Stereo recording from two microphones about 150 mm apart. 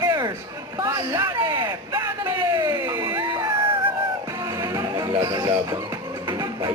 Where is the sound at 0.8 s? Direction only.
25° right (ahead or behind).